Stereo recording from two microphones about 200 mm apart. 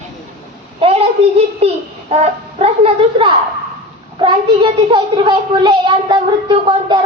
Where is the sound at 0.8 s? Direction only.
30° right (ahead or behind).